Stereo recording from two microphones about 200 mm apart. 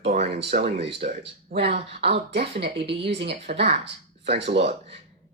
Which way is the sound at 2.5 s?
30° right (ahead or behind).